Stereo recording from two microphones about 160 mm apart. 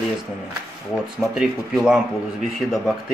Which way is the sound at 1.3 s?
5° right (ahead or behind).